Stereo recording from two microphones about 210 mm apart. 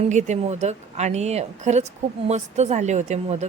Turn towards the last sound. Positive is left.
turn(degrees=-35)  # may be behind; listen again after turning